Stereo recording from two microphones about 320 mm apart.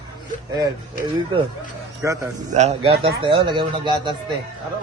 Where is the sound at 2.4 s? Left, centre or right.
Right.